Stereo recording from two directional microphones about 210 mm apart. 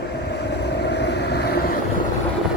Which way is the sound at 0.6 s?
55° left (ahead or behind).